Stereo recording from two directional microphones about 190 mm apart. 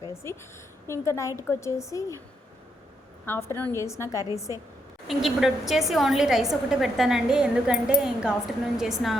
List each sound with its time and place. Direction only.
0.0 s a woman's voice: 15° left (ahead or behind)
3.2 s a woman's voice: 10° left (ahead or behind)
5.0 s a woman's voice: centre (ahead or behind)